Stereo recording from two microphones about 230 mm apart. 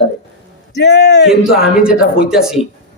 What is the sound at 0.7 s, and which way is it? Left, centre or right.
Speech, left.